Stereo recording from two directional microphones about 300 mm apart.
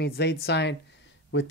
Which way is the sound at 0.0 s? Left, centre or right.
Left.